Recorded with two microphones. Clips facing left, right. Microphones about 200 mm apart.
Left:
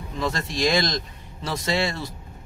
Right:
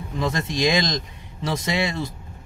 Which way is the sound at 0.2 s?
20° right (ahead or behind).